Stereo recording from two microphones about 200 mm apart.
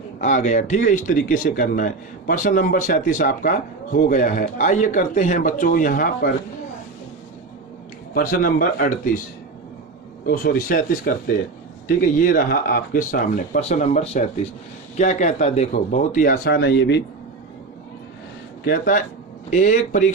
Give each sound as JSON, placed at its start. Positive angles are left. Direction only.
{"t": 0.2, "sound": "speech", "side_deg": 35}
{"t": 8.1, "sound": "speech", "side_deg": 45}
{"t": 10.2, "sound": "speech", "side_deg": 45}
{"t": 18.6, "sound": "speech", "side_deg": 45}